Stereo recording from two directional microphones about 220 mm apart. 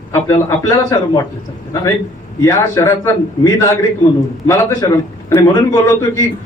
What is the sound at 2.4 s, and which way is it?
A man's voice, 15° left (ahead or behind).